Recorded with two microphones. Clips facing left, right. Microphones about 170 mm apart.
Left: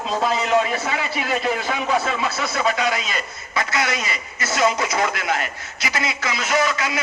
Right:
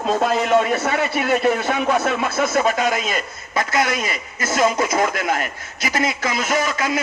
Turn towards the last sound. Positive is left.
turn(degrees=-45)  # may be behind; listen again after turning